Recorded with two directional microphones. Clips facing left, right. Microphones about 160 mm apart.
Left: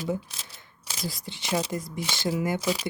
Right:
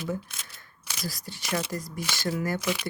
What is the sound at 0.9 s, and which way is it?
Speech, 25° left (ahead or behind).